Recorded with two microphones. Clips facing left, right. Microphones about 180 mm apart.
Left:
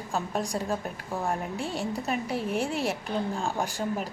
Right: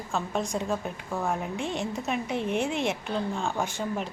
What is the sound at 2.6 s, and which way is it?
Speech, 35° left (ahead or behind).